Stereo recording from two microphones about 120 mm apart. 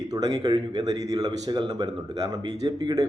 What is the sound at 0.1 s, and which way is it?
A man's voice, 35° right (ahead or behind).